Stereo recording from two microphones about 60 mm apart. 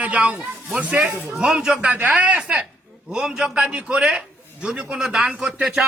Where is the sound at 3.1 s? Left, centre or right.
Centre.